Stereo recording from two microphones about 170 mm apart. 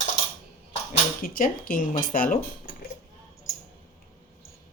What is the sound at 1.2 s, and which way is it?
Speech, 55° left (ahead or behind).